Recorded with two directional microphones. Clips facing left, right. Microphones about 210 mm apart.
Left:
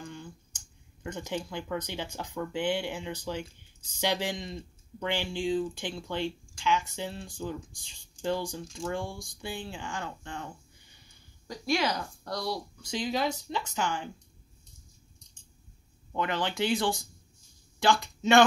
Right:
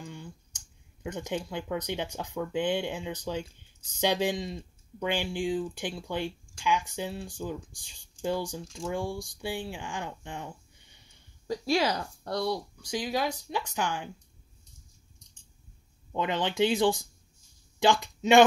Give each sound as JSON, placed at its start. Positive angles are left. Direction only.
{"t": 0.0, "sound": "a sound", "side_deg": -15}
{"t": 1.0, "sound": "speech", "side_deg": -15}
{"t": 11.4, "sound": "speech", "side_deg": -30}
{"t": 12.8, "sound": "speech", "side_deg": -15}
{"t": 16.2, "sound": "speech", "side_deg": -20}